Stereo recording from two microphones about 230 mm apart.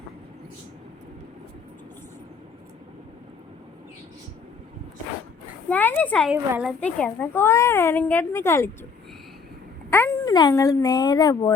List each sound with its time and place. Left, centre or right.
5.6 s a child's voice: centre
6.3 s a child's voice: centre
9.9 s a child's voice: centre